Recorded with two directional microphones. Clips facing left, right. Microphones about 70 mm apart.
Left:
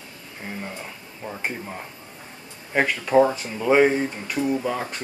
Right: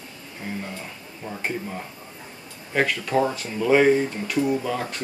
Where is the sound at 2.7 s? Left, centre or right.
Centre.